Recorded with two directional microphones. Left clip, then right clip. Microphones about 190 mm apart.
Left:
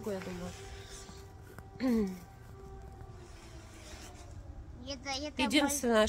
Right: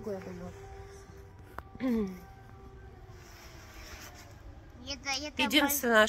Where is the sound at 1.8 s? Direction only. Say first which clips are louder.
Even; 5° left (ahead or behind).